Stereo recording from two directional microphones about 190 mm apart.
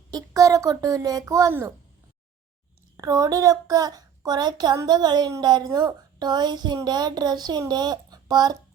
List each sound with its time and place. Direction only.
0.1 s a woman's voice: 20° right (ahead or behind)
3.0 s speech: 20° right (ahead or behind)